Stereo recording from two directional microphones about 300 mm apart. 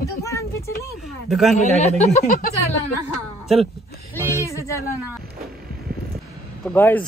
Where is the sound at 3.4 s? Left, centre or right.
Centre.